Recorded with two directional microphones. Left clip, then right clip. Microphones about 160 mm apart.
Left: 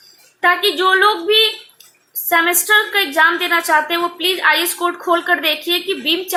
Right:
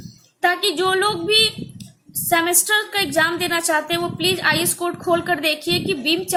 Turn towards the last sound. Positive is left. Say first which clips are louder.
# left 3 dB
turn(degrees=-25)  # may be behind; listen again after turning